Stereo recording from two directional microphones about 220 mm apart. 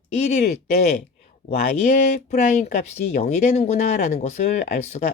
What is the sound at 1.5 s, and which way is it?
Speech, 30° left (ahead or behind).